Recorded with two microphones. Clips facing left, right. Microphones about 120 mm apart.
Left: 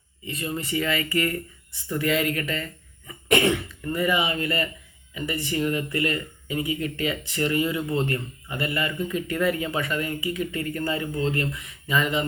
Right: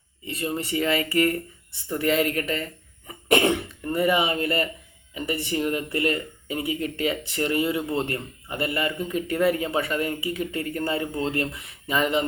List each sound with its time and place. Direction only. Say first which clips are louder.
0.4 s speech: right 2 dB; 35° right (ahead or behind)
5.6 s speech: right 1 dB; 40° right (ahead or behind)